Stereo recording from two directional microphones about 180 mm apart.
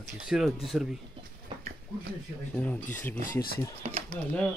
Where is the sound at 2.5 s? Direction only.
10° left (ahead or behind).